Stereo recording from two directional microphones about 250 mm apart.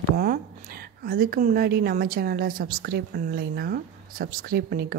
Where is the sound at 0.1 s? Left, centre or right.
Right.